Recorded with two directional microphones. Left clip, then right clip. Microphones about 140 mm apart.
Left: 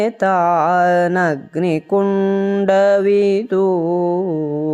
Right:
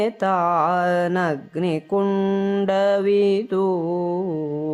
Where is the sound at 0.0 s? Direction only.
25° left (ahead or behind).